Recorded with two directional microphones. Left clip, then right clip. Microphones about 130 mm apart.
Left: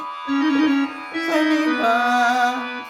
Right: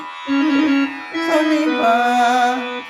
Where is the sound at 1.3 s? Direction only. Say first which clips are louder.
Right 3 dB; 25° right (ahead or behind).